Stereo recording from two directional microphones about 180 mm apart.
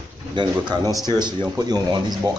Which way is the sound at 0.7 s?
25° right (ahead or behind).